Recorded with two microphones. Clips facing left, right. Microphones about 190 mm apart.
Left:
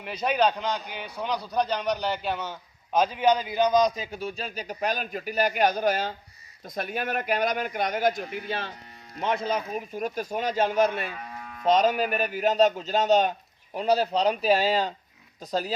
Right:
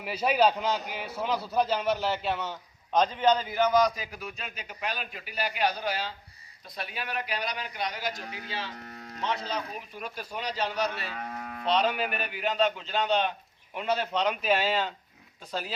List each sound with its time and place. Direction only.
0.0 s a man's voice: 5° right (ahead or behind); by 11.1 s 50° left (ahead or behind)
11.2 s cattle: 55° right (ahead or behind)
11.6 s a man's voice: 45° left (ahead or behind)